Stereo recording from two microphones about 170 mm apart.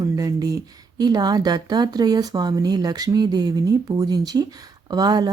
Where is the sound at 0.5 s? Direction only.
25° right (ahead or behind).